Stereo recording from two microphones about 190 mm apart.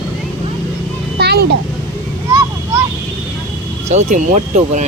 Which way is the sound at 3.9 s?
35° right (ahead or behind).